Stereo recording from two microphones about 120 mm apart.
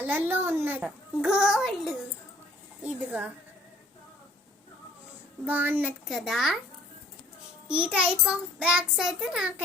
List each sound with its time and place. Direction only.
0.0 s child singing: 15° right (ahead or behind)
0.9 s a child's voice: 5° right (ahead or behind)
2.8 s child singing: 10° right (ahead or behind)
5.5 s child singing: 15° right (ahead or behind)
6.1 s a child's voice: centre (ahead or behind)
7.9 s child singing: 10° right (ahead or behind)